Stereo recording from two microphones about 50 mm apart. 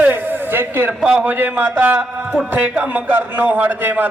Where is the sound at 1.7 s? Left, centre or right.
Right.